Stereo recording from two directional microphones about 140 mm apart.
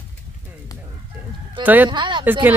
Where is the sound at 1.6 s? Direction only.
15° right (ahead or behind).